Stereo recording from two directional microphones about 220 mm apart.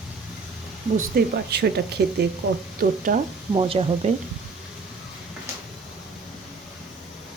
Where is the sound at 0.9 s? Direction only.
45° right (ahead or behind).